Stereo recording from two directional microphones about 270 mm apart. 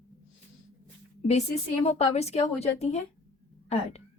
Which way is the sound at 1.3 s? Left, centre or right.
Left.